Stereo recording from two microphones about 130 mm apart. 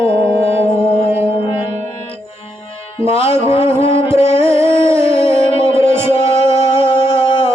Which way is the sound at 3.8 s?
50° left (ahead or behind).